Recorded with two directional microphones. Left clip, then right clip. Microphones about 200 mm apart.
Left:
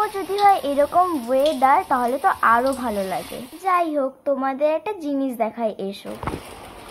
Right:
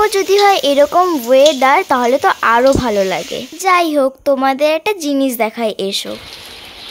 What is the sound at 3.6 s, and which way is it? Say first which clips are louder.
A child's voice: right 8 dB; 65° right (ahead or behind).